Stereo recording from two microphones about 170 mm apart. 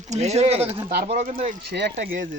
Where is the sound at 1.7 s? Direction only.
80° right.